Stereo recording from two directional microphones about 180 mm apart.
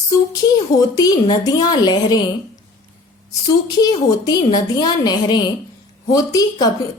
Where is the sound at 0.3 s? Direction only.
20° left (ahead or behind).